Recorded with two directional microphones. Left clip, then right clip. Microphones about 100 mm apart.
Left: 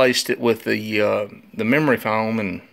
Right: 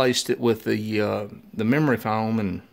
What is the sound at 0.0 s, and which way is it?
Speech, 35° right (ahead or behind).